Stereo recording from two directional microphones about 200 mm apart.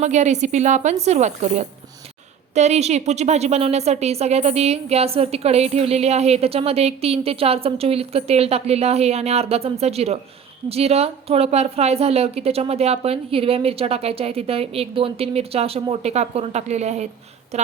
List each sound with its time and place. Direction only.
0.0 s a woman's voice: 35° right (ahead or behind)